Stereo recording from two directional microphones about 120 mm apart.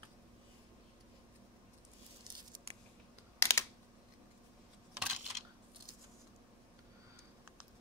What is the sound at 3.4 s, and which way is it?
Computer keyboard, 25° left (ahead or behind).